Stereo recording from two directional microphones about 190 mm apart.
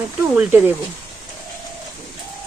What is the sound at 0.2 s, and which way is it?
Speech, 10° right (ahead or behind).